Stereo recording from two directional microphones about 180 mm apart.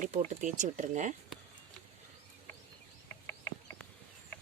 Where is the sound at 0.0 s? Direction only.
45° right (ahead or behind).